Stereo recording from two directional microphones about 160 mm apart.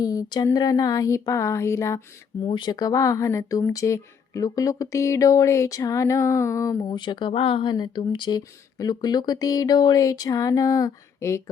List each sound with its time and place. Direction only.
0.0 s speech: 20° left (ahead or behind)
2.5 s speech: 30° left (ahead or behind)